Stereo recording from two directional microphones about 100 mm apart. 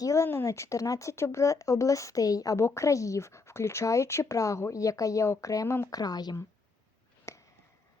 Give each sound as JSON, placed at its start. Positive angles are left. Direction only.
{"t": 0.0, "sound": "speech", "side_deg": 30}
{"t": 5.9, "sound": "speech", "side_deg": 40}
{"t": 7.3, "sound": "a sound", "side_deg": 30}